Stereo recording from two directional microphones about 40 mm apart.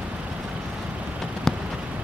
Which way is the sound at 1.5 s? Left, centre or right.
Centre.